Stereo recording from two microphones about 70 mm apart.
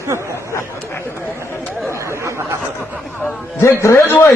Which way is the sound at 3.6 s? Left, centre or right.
Left.